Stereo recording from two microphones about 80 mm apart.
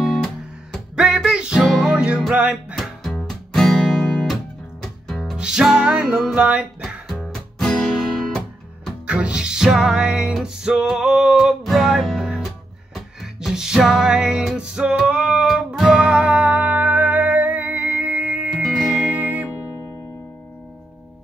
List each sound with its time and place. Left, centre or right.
0.0 s music: centre
1.6 s music: centre
2.0 s music: centre
2.7 s music: centre
5.4 s music: centre
7.2 s music: centre
9.0 s music: centre
15.4 s music: centre
18.6 s music: centre
19.1 s music: centre